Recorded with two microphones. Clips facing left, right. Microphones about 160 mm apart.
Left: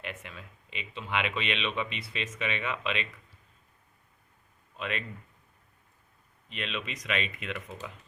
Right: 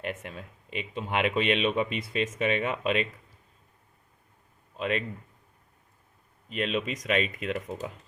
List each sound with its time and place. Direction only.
0.0 s speech: 45° right (ahead or behind)
4.8 s speech: 40° right (ahead or behind)
6.5 s speech: 45° right (ahead or behind)